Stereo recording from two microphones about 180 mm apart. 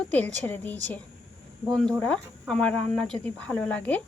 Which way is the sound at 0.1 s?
10° left (ahead or behind).